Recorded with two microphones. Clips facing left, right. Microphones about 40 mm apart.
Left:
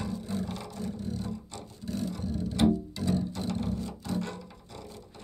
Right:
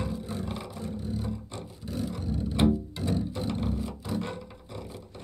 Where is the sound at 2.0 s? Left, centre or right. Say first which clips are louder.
Right 1 dB; centre.